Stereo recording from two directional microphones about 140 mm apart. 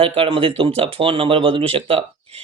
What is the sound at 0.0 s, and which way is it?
Speech, 40° right (ahead or behind).